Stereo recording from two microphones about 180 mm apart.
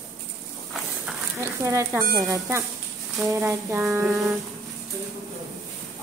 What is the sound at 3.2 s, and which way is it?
Speech, 15° right (ahead or behind).